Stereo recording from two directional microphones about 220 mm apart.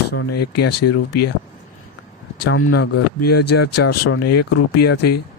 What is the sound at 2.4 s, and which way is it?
Speech, 75° left (ahead or behind).